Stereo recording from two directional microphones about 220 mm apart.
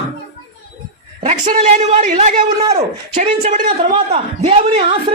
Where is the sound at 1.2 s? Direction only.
30° right (ahead or behind).